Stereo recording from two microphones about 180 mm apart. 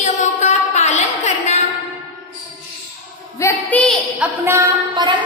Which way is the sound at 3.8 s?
Centre (ahead or behind).